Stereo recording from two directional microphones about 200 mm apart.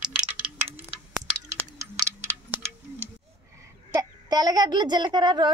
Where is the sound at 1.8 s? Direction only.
15° right (ahead or behind).